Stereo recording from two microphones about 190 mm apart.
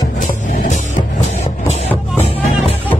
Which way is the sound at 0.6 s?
40° left (ahead or behind).